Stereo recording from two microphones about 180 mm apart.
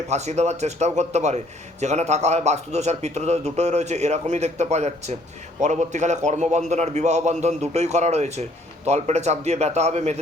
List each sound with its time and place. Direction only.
0.1 s a man's voice: 40° right (ahead or behind)